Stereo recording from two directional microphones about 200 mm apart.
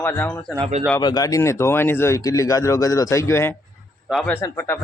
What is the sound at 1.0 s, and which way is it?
A man's voice, 20° left (ahead or behind).